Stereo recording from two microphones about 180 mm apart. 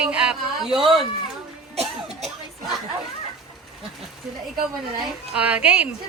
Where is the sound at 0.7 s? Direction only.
30° right (ahead or behind).